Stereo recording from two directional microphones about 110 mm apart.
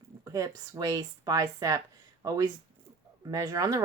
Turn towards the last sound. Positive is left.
turn(degrees=-30)  # may be behind; listen again after turning